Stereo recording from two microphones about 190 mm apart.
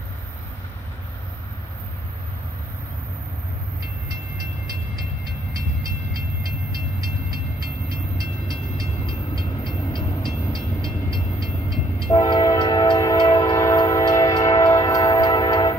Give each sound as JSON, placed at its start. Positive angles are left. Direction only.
{"t": 7.9, "sound": "train", "side_deg": -50}
{"t": 9.0, "sound": "train", "side_deg": 25}
{"t": 11.4, "sound": "train", "side_deg": 0}
{"t": 12.2, "sound": "train", "side_deg": 20}